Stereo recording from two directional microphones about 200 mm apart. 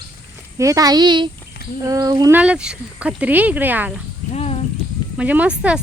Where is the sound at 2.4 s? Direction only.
5° right (ahead or behind).